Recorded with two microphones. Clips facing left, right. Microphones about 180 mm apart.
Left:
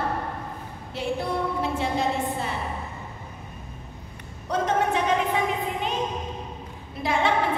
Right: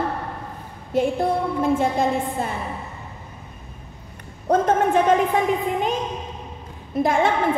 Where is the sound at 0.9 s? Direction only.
50° right (ahead or behind).